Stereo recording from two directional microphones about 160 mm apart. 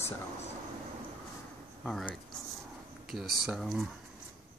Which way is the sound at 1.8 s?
5° left (ahead or behind).